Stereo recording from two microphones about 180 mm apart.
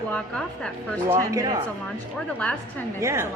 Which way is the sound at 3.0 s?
15° right (ahead or behind).